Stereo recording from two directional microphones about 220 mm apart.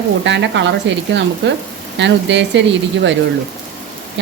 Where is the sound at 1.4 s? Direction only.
55° right (ahead or behind).